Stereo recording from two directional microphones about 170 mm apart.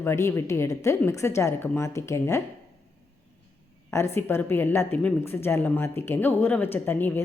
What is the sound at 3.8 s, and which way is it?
A woman's voice, 15° left (ahead or behind).